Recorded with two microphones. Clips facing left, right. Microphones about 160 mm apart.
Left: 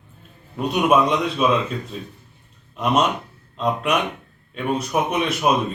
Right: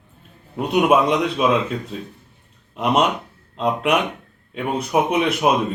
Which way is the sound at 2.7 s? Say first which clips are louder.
Right 1 dB; 15° right (ahead or behind).